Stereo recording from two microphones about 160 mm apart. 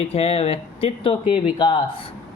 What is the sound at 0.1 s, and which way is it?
Speech, 40° left (ahead or behind).